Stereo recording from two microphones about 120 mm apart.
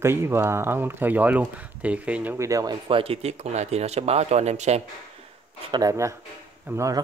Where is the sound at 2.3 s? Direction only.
25° right (ahead or behind).